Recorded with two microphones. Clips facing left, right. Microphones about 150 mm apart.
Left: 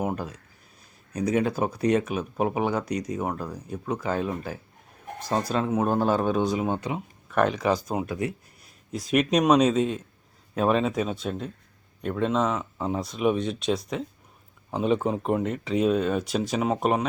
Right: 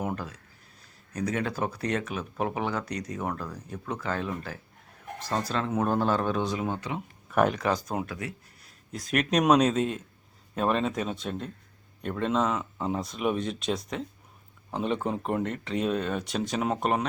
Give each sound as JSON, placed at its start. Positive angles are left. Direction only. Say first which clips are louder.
{"t": 0.0, "sound": "speech", "louder": "left 4 dB", "side_deg": 20}
{"t": 7.3, "sound": "speech", "louder": "left 2 dB", "side_deg": -5}